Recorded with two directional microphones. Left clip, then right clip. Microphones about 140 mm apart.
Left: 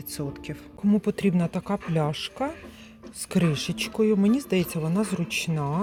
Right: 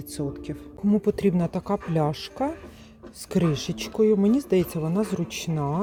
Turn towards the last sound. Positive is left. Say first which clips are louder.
# left 1 dB
turn(degrees=-25)  # may be behind; listen again after turning